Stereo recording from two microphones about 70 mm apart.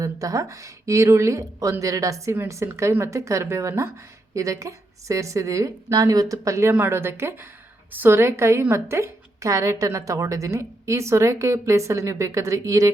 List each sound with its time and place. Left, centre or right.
0.0 s a woman's voice: right
6.7 s a woman's voice: right